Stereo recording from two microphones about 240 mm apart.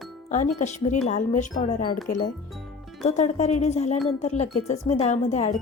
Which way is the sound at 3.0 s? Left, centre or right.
Left.